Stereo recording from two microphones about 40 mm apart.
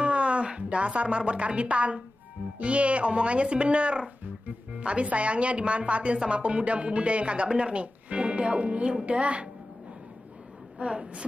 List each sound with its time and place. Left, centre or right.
0.0 s speech: right
4.2 s music: right
4.8 s a woman's voice: right
10.8 s speech: right